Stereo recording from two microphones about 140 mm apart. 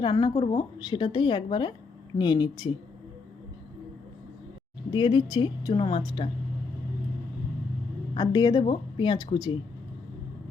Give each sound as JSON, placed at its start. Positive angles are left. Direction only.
{"t": 0.0, "sound": "speech", "side_deg": 30}
{"t": 4.9, "sound": "speech", "side_deg": 35}
{"t": 8.1, "sound": "a woman's voice", "side_deg": 30}